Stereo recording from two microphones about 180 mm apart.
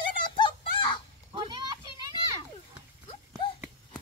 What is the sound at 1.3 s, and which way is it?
Children playing, 25° right (ahead or behind).